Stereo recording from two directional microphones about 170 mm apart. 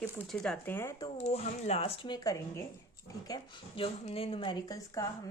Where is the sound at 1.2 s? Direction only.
40° left (ahead or behind).